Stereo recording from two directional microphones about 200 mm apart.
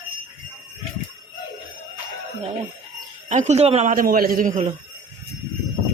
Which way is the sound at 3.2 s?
35° right (ahead or behind).